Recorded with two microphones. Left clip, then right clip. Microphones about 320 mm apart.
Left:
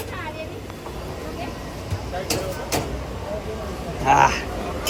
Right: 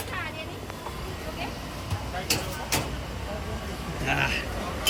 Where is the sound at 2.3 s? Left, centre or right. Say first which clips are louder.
Left 3 dB; centre.